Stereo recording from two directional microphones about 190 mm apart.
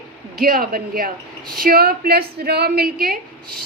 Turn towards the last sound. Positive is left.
turn(degrees=-50)  # may be behind; listen again after turning